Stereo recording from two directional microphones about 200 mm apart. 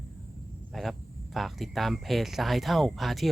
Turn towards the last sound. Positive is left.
turn(degrees=0)  # may be behind; listen again after turning